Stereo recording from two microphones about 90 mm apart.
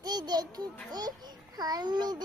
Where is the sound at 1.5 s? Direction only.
50° right (ahead or behind).